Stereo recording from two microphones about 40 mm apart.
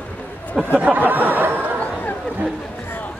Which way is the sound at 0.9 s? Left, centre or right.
Right.